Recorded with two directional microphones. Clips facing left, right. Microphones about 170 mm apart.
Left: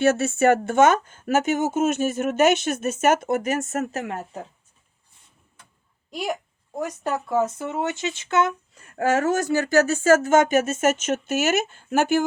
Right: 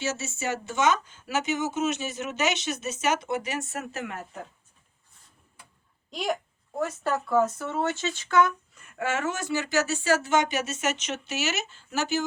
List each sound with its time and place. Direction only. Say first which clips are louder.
0.0 s speech: left 12 dB; 60° left (ahead or behind); by 4.3 s 35° left (ahead or behind)
6.1 s speech: left 1 dB; 10° left (ahead or behind); by 12.2 s 55° left (ahead or behind)